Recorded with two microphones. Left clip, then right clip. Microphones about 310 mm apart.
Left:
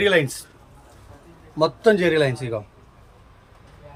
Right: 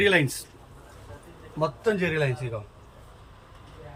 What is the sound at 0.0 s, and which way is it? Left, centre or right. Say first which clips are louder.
Speech: left 3 dB; centre.